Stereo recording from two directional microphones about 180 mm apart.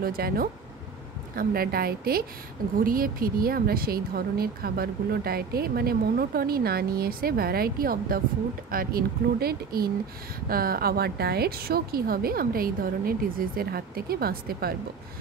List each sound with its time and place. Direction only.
0.0 s speech: 55° right (ahead or behind)